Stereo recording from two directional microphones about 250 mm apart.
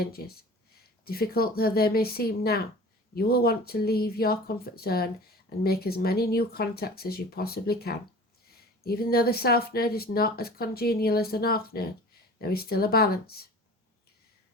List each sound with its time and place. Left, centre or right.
0.0 s speech: left